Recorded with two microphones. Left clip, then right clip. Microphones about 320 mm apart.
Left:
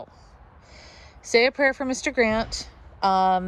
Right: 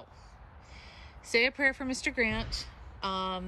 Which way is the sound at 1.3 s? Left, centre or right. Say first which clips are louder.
Left 7 dB; centre.